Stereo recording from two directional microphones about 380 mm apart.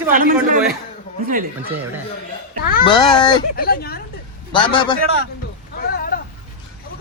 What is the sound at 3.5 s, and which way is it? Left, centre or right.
Speech, left.